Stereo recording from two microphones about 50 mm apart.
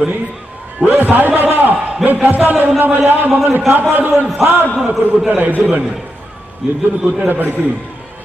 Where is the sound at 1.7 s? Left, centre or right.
Right.